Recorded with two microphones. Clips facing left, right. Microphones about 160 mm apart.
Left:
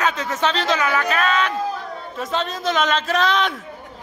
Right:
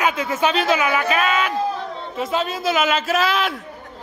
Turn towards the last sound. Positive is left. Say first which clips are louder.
# even
turn(degrees=-5)  # may be behind; listen again after turning